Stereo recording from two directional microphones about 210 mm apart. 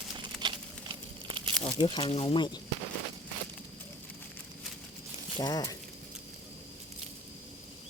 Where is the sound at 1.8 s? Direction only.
25° left (ahead or behind).